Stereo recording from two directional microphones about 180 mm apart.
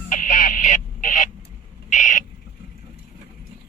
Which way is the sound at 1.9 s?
45° left (ahead or behind).